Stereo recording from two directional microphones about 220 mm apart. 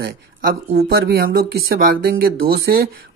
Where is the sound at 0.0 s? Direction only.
45° right (ahead or behind).